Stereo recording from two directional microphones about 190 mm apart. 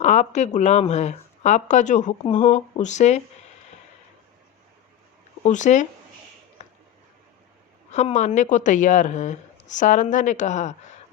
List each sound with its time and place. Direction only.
0.0 s speech: 35° left (ahead or behind)
5.4 s speech: 40° left (ahead or behind)
6.6 s finger snapping: 40° left (ahead or behind)
7.9 s speech: 35° left (ahead or behind)